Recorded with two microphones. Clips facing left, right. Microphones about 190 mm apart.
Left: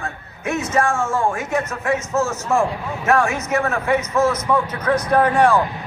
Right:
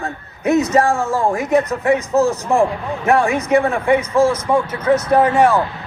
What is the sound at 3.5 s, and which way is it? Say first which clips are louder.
A man's voice: right 5 dB; 30° right (ahead or behind).